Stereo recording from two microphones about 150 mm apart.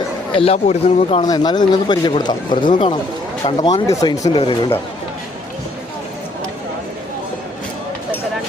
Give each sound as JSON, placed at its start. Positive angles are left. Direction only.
{"t": 0.3, "sound": "speech", "side_deg": 40}
{"t": 1.2, "sound": "speech", "side_deg": 25}